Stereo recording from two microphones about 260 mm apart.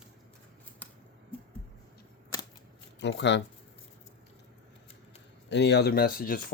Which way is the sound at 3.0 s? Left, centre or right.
Left.